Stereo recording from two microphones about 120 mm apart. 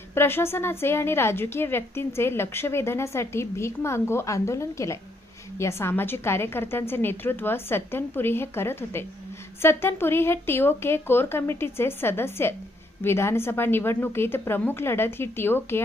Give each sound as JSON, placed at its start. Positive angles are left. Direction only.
{"t": 0.1, "sound": "a woman's voice", "side_deg": 20}